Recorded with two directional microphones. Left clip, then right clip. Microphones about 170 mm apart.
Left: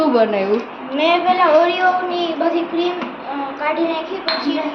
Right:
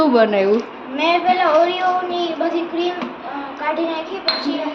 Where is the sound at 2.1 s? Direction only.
5° left (ahead or behind).